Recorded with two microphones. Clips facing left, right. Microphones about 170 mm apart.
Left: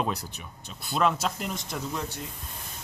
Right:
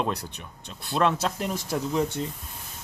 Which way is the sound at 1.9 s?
25° right (ahead or behind).